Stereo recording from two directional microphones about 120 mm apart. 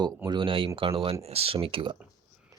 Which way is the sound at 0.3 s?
45° right (ahead or behind).